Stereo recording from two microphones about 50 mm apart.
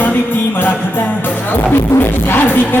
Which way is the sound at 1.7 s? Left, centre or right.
Left.